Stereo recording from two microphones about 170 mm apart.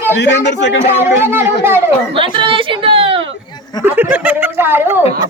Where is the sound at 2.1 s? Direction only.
30° right (ahead or behind).